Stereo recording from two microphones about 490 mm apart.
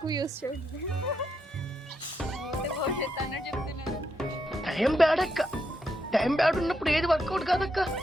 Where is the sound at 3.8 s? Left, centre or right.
Centre.